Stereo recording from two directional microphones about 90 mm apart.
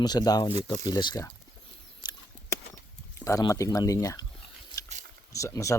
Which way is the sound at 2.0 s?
50° left (ahead or behind).